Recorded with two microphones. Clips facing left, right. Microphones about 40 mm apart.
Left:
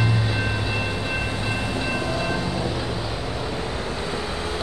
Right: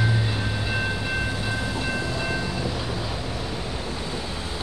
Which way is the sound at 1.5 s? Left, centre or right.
Left.